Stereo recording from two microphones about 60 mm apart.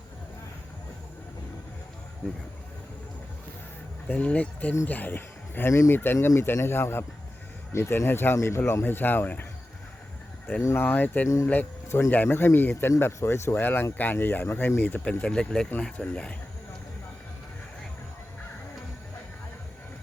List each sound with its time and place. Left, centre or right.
4.1 s speech: left
10.8 s speech: left
11.9 s speech: left
13.1 s speech: left
15.0 s speech: centre